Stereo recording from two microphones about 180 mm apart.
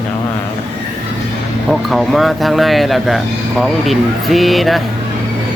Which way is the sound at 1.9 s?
Centre (ahead or behind).